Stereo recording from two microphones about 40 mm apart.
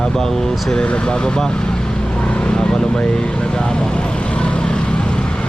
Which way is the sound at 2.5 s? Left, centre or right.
Centre.